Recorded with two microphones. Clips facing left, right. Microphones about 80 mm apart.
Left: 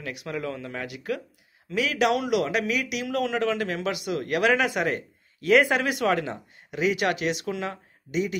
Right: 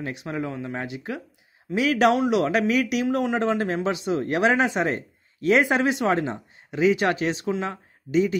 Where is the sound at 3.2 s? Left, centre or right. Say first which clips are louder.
Right 2 dB; right.